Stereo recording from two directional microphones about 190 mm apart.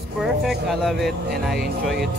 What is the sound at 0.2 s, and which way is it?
Speech, centre (ahead or behind).